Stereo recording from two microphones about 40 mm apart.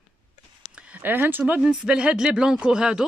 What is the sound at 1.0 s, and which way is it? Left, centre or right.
Speech, right.